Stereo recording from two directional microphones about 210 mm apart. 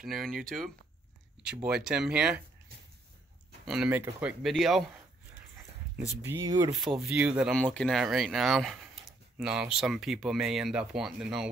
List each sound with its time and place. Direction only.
0.0 s speech: centre (ahead or behind)
1.5 s speech: 5° right (ahead or behind)
3.6 s speech: 5° right (ahead or behind)
6.2 s speech: 15° right (ahead or behind)
7.0 s speech: 5° right (ahead or behind)